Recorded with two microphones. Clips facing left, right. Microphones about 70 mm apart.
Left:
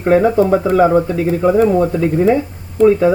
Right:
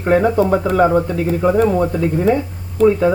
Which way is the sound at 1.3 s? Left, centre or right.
Centre.